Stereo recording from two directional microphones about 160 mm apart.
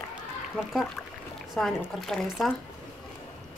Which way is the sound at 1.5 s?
Centre (ahead or behind).